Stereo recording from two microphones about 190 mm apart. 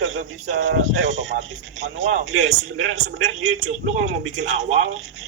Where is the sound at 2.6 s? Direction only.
85° right.